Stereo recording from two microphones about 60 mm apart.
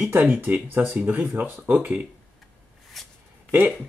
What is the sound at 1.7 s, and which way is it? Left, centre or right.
Speech, right.